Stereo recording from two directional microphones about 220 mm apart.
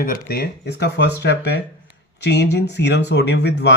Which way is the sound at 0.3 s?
45° left (ahead or behind).